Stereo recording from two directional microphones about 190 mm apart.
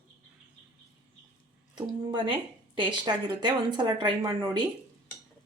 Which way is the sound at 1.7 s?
25° right (ahead or behind).